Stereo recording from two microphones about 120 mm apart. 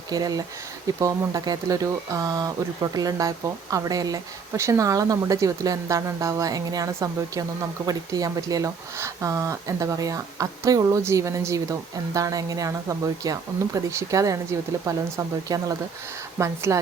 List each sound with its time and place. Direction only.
0.1 s speech: 30° right (ahead or behind)